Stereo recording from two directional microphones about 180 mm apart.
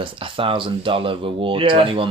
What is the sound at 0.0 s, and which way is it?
Speech, 30° right (ahead or behind).